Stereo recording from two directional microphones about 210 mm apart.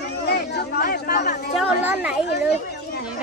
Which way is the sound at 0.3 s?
50° left (ahead or behind).